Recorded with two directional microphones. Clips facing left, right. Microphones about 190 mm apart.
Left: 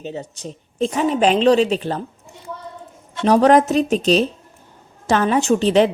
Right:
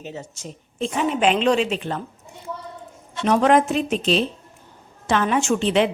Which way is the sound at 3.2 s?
35° left (ahead or behind).